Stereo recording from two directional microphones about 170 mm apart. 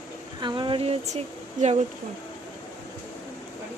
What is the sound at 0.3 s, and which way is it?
Speech, 25° right (ahead or behind).